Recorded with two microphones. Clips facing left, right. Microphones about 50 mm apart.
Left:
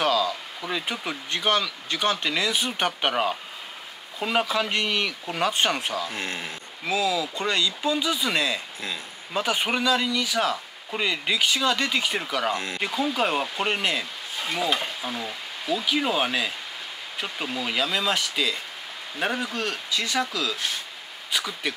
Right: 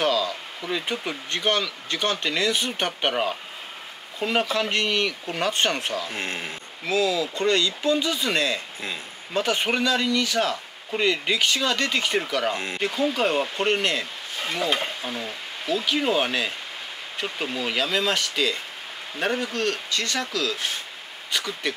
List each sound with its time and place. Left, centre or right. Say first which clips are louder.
0.0 s a sound: even; centre
0.8 s a man's voice: right 1 dB; centre
6.1 s speech: right 1 dB; right
6.9 s a man's voice: right 2 dB; centre
12.5 s speech: even; right
12.8 s a man's voice: right 2 dB; centre